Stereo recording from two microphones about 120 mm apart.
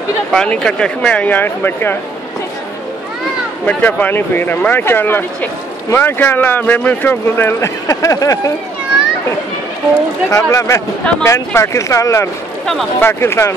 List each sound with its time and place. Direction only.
0.3 s speech: 5° left (ahead or behind)
3.6 s speech: 15° left (ahead or behind)
10.3 s speech: 25° left (ahead or behind)